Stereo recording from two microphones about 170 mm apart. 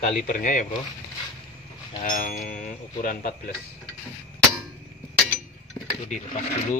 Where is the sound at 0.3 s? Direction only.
50° left (ahead or behind).